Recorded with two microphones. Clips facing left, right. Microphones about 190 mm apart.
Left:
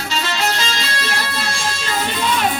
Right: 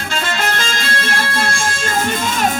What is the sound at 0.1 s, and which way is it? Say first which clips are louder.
Music: right 1 dB; 50° right (ahead or behind).